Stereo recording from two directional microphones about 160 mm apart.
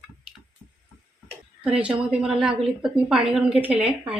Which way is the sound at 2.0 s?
5° right (ahead or behind).